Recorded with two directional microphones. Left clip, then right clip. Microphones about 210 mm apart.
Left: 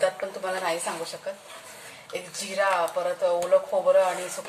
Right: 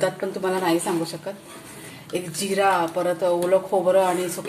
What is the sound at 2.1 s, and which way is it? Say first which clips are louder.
Speech: right 4 dB; 20° right (ahead or behind).